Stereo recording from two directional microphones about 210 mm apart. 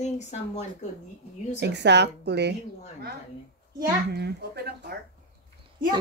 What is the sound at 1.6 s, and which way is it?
Speech, 55° right (ahead or behind).